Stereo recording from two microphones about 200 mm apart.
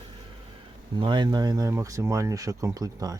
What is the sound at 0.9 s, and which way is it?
Speech, 25° right (ahead or behind).